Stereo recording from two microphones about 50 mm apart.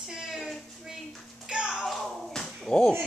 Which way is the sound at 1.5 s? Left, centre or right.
Centre.